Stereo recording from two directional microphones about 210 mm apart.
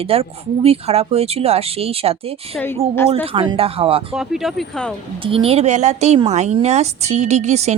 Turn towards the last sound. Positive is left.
turn(degrees=-30)  # may be behind; listen again after turning